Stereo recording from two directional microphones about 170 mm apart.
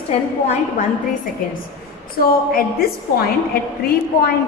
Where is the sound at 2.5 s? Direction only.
60° left (ahead or behind).